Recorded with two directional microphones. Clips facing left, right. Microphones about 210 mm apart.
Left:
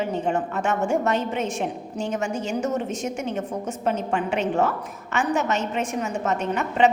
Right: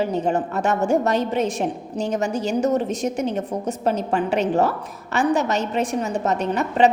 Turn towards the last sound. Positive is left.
turn(degrees=-35)  # may be behind; listen again after turning